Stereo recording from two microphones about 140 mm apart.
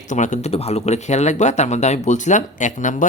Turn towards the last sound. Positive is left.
turn(degrees=65)  # may be behind; listen again after turning